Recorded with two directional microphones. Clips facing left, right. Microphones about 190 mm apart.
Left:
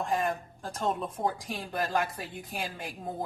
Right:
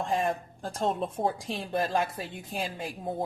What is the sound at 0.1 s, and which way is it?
Speech, 30° right (ahead or behind).